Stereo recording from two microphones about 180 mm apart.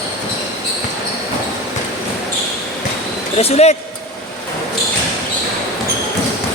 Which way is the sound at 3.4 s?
35° left (ahead or behind).